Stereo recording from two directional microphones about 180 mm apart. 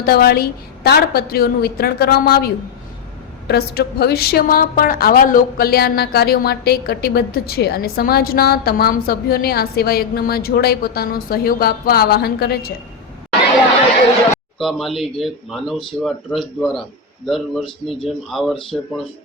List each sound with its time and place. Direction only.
0.0 s a woman's voice: 60° left (ahead or behind)
14.6 s speech: centre (ahead or behind)